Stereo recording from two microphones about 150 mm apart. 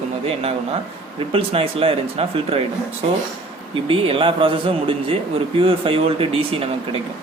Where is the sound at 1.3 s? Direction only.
40° right (ahead or behind).